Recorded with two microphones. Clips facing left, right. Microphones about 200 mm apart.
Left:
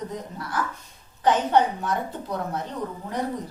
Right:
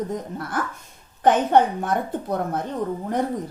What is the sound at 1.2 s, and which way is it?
A woman's voice, 55° right (ahead or behind).